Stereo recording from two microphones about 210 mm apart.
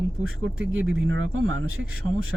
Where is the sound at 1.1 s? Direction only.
65° right (ahead or behind).